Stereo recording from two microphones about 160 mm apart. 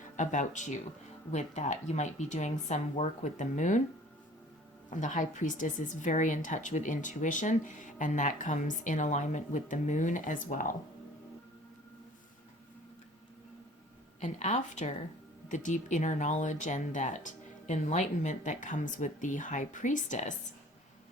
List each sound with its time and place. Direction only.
0.2 s speech: 50° left (ahead or behind)
4.9 s speech: 50° left (ahead or behind)
14.2 s speech: 50° left (ahead or behind)